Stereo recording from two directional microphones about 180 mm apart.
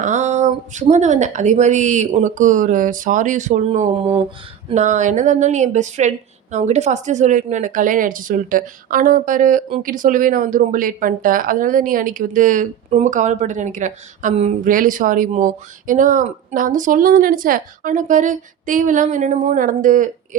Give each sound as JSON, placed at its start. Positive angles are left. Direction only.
{"t": 0.0, "sound": "a woman's voice", "side_deg": -40}